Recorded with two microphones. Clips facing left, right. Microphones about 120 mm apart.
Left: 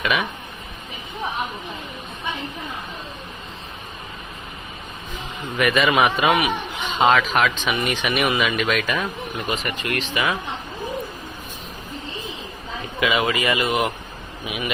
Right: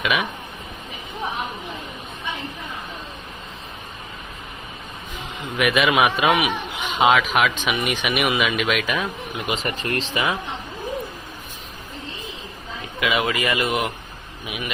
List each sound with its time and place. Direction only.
0.0 s speech: 5° right (ahead or behind)
5.5 s a man's voice: 5° right (ahead or behind)
9.6 s speech: 30° right (ahead or behind)
13.0 s a man's voice: centre (ahead or behind)